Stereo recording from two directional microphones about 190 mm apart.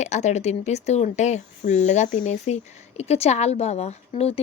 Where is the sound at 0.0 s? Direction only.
40° left (ahead or behind).